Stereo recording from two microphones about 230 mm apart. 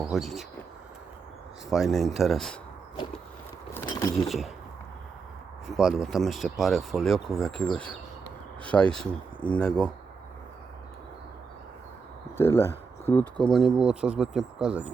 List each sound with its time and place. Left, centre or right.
0.0 s speech: centre
1.7 s speech: centre
4.3 s speech: centre
5.6 s speech: centre
12.4 s speech: centre